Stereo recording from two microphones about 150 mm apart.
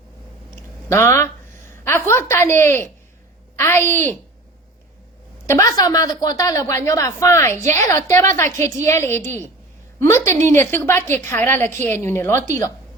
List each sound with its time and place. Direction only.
0.5 s a sound: 15° left (ahead or behind)
3.6 s a woman's voice: 15° left (ahead or behind)
5.5 s a woman's voice: 20° left (ahead or behind)